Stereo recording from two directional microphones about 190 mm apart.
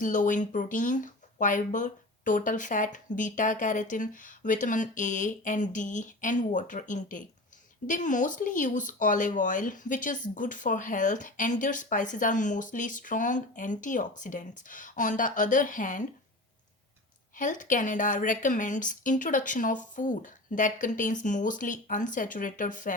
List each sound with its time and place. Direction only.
0.0 s speech: 45° left (ahead or behind)
17.3 s speech: 45° left (ahead or behind)